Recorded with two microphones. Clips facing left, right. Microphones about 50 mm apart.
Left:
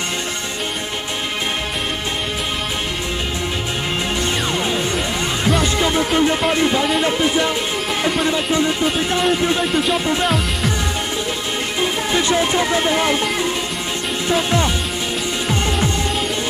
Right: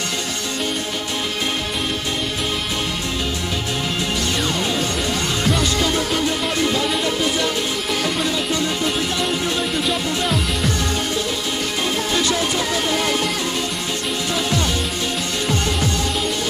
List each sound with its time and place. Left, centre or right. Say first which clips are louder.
5.6 s music: left 2 dB; left
10.2 s music: left 2 dB; centre
12.1 s music: left 5 dB; left